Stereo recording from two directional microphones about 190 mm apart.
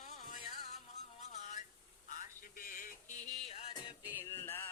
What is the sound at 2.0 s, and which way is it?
Music, 45° left (ahead or behind).